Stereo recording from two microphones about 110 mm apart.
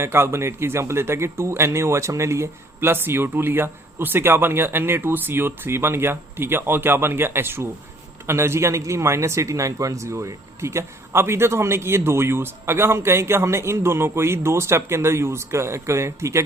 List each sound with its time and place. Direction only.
0.0 s a man's voice: 25° right (ahead or behind)